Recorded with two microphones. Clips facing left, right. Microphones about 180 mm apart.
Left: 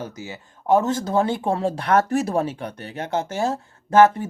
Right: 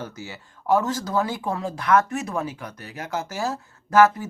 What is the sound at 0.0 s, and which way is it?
Speech, 15° left (ahead or behind).